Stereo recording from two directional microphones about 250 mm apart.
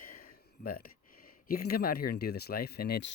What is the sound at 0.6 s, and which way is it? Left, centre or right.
Speech, left.